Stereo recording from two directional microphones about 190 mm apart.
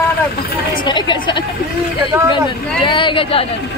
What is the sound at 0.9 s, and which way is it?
Speech, 25° left (ahead or behind).